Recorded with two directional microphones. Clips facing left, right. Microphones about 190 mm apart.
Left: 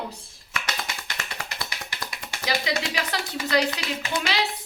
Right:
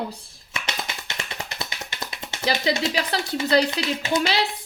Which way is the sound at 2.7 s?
25° right (ahead or behind).